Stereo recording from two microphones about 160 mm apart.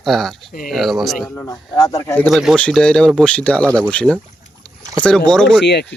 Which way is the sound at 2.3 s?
Centre (ahead or behind).